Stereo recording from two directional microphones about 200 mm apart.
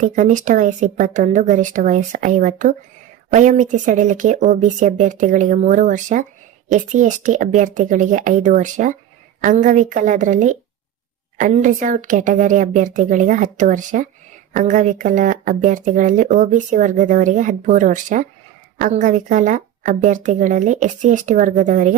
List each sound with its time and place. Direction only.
0.0 s speech: 40° right (ahead or behind)